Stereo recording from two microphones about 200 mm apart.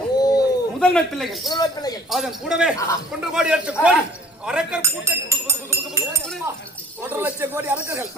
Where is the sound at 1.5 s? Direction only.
20° left (ahead or behind).